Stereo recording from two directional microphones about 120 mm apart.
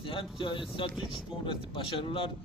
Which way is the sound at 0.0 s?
45° left (ahead or behind).